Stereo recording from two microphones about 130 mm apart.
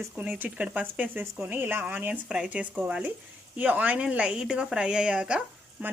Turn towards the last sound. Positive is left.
turn(degrees=-10)  # may be behind; listen again after turning